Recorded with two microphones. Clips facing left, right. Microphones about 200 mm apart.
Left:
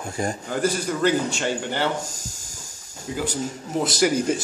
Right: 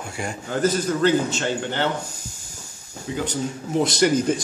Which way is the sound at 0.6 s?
10° left (ahead or behind).